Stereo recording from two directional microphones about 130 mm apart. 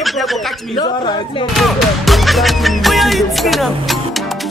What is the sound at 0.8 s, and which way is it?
Speech, 35° left (ahead or behind).